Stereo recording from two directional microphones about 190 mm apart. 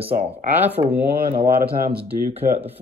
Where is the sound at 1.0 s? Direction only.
55° right (ahead or behind).